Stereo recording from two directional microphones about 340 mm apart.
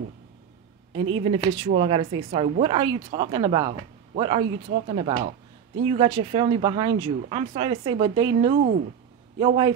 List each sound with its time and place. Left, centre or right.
1.1 s speech: centre